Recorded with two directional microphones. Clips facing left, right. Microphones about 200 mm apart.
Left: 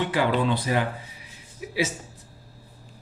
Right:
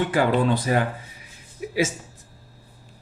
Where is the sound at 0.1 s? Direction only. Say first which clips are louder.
Right 3 dB; 45° right (ahead or behind).